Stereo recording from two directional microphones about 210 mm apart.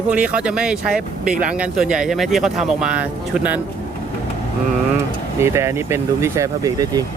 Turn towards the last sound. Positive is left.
turn(degrees=-15)  # may be behind; listen again after turning